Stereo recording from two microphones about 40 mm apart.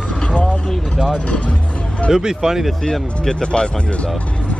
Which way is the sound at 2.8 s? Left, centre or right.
Centre.